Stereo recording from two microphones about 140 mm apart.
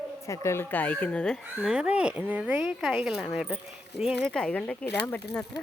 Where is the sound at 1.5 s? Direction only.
5° right (ahead or behind).